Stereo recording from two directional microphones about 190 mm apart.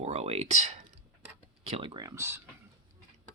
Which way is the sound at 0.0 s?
35° right (ahead or behind).